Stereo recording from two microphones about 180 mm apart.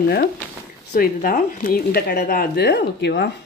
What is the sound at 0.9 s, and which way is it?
Speech, 50° left (ahead or behind).